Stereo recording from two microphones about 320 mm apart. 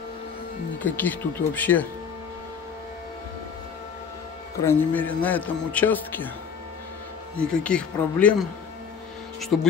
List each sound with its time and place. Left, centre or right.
0.8 s a man's voice: centre
4.6 s a man's voice: centre
7.3 s a man's voice: centre
9.5 s a man's voice: centre